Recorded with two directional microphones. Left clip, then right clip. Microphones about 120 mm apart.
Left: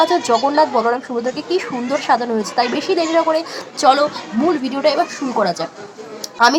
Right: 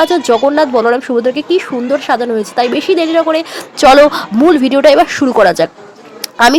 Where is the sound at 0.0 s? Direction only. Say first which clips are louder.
Right 5 dB; 40° right (ahead or behind).